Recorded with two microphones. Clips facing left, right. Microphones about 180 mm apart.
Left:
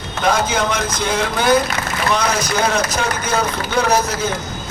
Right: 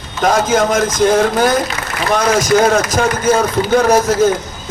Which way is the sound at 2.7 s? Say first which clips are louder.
Right 5 dB; 45° right (ahead or behind).